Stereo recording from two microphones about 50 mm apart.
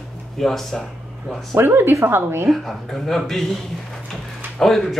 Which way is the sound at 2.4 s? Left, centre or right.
Centre.